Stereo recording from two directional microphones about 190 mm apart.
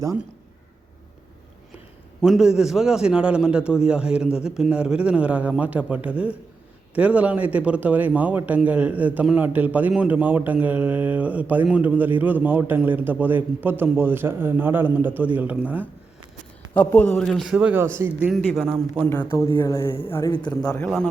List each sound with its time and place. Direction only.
2.2 s a man's voice: 5° right (ahead or behind)
16.7 s a man's voice: 10° left (ahead or behind)
19.1 s a man's voice: 10° left (ahead or behind)